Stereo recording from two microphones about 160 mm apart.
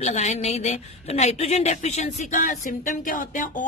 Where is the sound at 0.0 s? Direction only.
45° left (ahead or behind).